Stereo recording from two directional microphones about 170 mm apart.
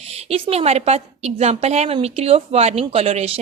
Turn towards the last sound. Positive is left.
turn(degrees=-35)  # may be behind; listen again after turning